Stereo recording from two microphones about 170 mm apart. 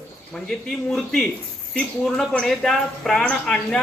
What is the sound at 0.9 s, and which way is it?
Speech, 5° left (ahead or behind).